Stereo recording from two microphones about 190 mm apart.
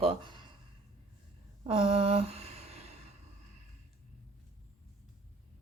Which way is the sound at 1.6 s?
30° right (ahead or behind).